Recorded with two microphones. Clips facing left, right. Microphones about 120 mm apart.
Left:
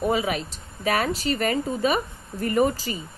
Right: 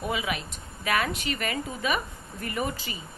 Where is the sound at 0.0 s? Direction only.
40° left (ahead or behind).